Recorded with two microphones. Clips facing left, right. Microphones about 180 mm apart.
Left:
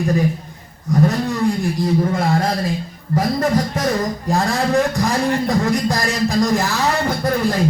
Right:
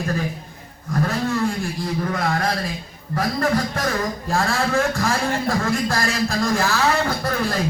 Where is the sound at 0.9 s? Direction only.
20° left (ahead or behind).